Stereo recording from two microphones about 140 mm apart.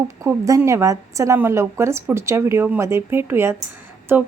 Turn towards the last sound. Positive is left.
turn(degrees=-15)  # may be behind; listen again after turning